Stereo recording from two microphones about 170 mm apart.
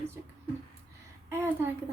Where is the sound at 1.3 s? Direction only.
15° right (ahead or behind).